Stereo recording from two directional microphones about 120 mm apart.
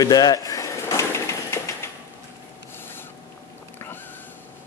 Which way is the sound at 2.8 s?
15° left (ahead or behind).